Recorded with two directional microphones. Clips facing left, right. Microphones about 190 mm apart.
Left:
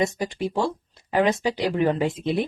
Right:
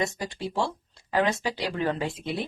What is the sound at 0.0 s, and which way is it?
Speech, 15° left (ahead or behind).